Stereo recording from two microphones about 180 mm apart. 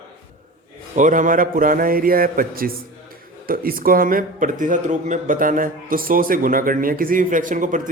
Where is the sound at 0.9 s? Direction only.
45° right (ahead or behind).